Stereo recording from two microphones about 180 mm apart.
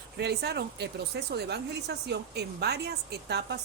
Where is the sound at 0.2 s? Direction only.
65° right (ahead or behind).